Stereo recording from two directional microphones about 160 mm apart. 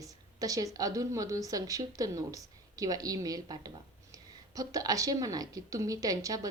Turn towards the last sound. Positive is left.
turn(degrees=-20)  # may be behind; listen again after turning